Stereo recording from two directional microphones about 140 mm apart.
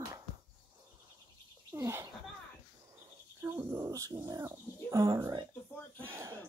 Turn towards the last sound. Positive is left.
turn(degrees=-20)  # may be behind; listen again after turning